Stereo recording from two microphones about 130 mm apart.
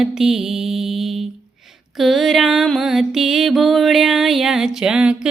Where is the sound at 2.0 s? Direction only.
Centre (ahead or behind).